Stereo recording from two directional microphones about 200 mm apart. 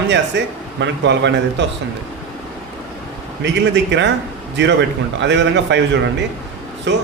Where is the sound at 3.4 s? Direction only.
60° right (ahead or behind).